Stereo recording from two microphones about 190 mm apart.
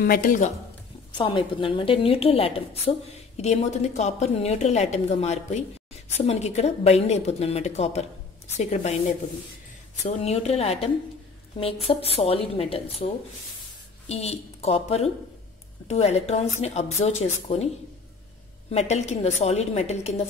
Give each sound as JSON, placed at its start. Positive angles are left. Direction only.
{"t": 0.0, "sound": "speech", "side_deg": 50}
{"t": 1.1, "sound": "a woman's voice", "side_deg": 25}
{"t": 18.7, "sound": "a woman's voice", "side_deg": 35}